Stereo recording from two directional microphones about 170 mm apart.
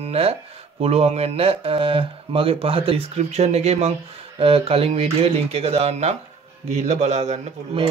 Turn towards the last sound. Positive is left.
turn(degrees=-40)  # may be behind; listen again after turning